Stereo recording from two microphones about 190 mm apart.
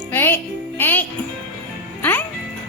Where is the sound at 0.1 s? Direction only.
10° left (ahead or behind).